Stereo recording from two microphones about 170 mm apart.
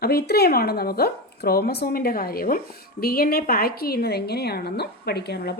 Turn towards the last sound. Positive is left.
turn(degrees=70)  # may be behind; listen again after turning